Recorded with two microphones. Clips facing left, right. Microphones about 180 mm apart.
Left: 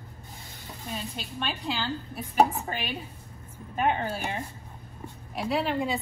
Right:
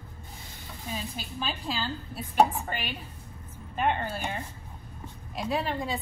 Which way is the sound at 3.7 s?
10° left (ahead or behind).